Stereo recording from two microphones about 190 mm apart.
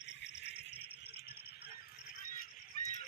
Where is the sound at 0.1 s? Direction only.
65° left (ahead or behind).